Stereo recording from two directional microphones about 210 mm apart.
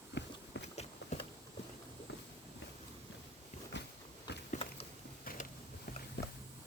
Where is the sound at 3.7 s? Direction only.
55° left (ahead or behind).